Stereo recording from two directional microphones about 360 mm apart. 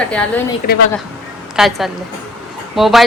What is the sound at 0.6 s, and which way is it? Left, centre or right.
Speech, left.